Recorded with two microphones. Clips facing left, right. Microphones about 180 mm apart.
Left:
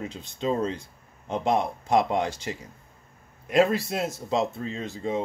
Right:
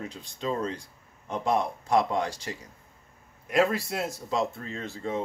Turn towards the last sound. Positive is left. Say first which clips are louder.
# left 3 dB
turn(degrees=15)  # may be behind; listen again after turning